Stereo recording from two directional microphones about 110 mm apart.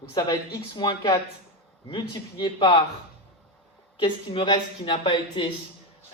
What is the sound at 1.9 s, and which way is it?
Speech, 45° left (ahead or behind).